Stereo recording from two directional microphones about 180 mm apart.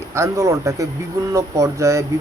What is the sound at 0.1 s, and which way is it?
Speech, 15° right (ahead or behind).